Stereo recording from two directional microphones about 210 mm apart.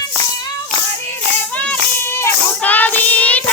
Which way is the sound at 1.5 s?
10° left (ahead or behind).